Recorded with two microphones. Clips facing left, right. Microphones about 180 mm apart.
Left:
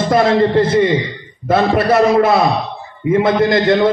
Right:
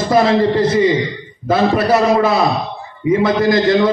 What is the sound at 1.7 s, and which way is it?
A man's voice, 55° left (ahead or behind).